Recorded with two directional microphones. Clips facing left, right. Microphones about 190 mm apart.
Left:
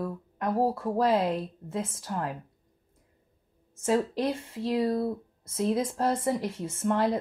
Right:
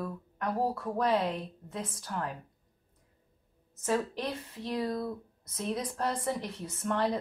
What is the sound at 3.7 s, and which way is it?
Speech, 25° left (ahead or behind).